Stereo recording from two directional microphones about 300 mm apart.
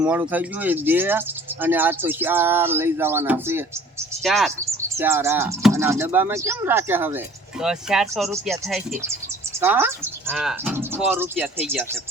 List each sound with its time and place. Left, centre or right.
0.0 s speech: centre